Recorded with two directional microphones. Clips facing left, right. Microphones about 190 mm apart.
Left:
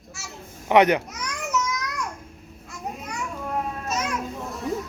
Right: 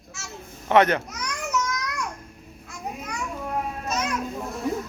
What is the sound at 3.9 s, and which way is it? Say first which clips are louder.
Children playing: right 1 dB; 5° left (ahead or behind).